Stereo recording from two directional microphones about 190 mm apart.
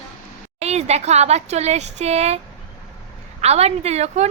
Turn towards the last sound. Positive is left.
turn(degrees=-35)  # may be behind; listen again after turning